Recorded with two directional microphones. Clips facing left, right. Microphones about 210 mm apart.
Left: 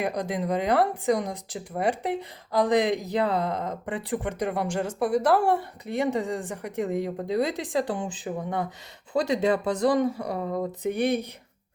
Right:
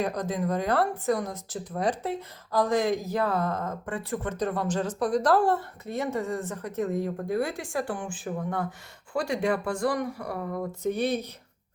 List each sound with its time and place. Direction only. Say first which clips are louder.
0.0 s speech: even; 15° left (ahead or behind)